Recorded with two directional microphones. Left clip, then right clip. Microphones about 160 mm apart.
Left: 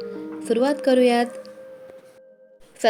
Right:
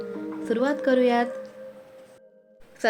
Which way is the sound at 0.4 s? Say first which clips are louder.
Left 4 dB; 25° left (ahead or behind).